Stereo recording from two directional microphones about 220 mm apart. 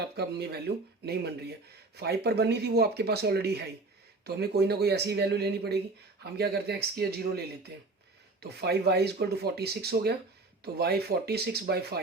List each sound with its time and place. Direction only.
0.0 s speech: 50° right (ahead or behind)